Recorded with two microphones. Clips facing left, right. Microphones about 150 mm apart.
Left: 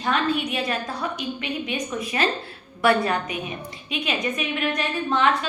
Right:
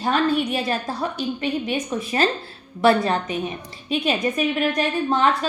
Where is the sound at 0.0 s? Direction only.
40° right (ahead or behind).